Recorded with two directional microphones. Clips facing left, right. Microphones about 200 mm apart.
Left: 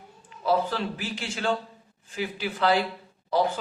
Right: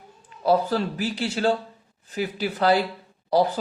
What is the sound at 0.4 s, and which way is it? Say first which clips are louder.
Speech: right 4 dB; 40° right (ahead or behind).